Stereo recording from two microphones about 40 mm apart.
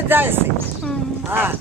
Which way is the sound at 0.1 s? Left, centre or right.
Right.